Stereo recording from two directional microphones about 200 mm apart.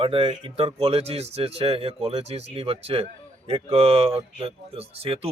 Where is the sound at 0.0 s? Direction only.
25° right (ahead or behind).